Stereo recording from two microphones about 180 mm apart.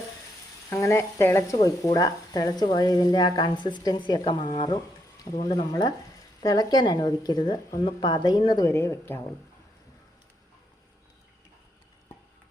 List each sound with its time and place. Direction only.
0.7 s speech: 15° left (ahead or behind)